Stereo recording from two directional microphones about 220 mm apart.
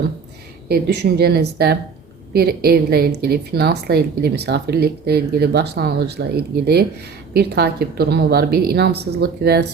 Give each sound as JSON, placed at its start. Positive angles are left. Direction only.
{"t": 0.7, "sound": "a woman's voice", "side_deg": -45}